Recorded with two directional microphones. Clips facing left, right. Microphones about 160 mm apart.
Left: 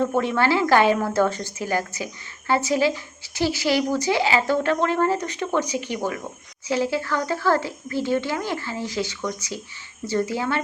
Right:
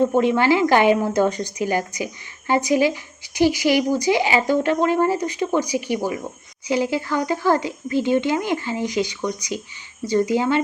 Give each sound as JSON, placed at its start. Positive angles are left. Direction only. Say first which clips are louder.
{"t": 0.0, "sound": "speech", "louder": "right 4 dB", "side_deg": -15}